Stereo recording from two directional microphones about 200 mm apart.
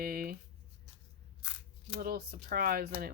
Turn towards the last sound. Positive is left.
turn(degrees=-45)  # may be behind; listen again after turning